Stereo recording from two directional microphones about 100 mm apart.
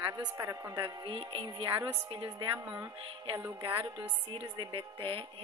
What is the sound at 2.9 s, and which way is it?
Music, 70° right (ahead or behind).